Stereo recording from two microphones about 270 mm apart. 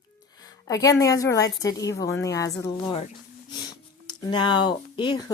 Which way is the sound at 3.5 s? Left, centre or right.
Centre.